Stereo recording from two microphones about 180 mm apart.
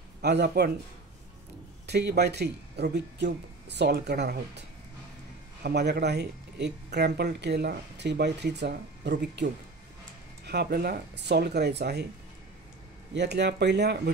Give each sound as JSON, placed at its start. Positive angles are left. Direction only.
{"t": 0.2, "sound": "speech", "side_deg": -65}
{"t": 1.9, "sound": "speech", "side_deg": -65}
{"t": 13.1, "sound": "speech", "side_deg": -70}